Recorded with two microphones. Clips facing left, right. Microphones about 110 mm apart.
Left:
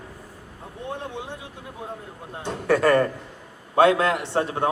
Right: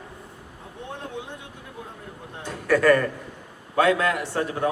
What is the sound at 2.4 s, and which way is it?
A man's voice, 25° left (ahead or behind).